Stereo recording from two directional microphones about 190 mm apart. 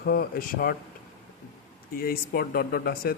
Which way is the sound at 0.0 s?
55° left (ahead or behind).